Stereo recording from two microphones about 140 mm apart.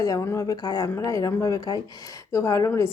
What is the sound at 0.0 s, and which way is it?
A woman's voice, 20° left (ahead or behind).